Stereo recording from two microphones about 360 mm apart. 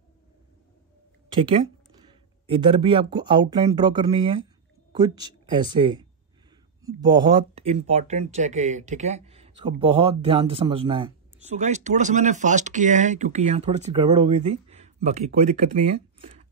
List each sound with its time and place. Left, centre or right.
1.4 s speech: centre